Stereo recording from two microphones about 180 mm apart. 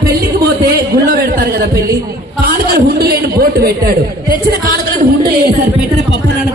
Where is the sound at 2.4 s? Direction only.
60° right (ahead or behind).